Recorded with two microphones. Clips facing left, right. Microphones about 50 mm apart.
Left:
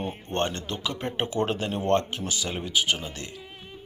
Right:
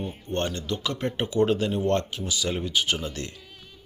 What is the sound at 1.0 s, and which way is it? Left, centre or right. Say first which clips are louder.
Speech: right 4 dB; left.